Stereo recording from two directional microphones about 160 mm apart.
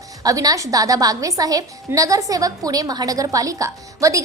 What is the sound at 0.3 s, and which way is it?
A woman's voice, 20° right (ahead or behind).